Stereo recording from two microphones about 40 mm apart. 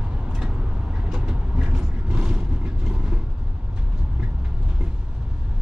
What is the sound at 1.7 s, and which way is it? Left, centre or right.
Mechanisms, right.